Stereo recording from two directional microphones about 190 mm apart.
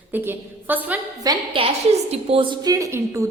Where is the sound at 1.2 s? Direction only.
25° right (ahead or behind).